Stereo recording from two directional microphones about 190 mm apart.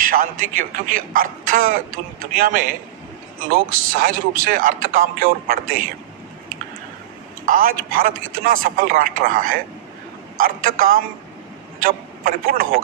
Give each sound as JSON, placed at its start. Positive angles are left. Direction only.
{"t": 0.0, "sound": "speech", "side_deg": -45}
{"t": 7.4, "sound": "a man's voice", "side_deg": -50}